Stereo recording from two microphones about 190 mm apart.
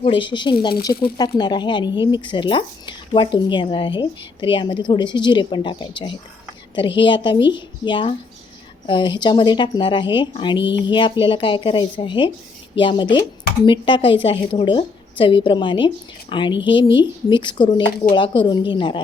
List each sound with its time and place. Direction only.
0.0 s speech: 25° left (ahead or behind)